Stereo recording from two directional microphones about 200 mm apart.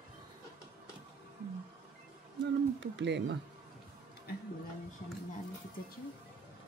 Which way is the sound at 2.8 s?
65° right (ahead or behind).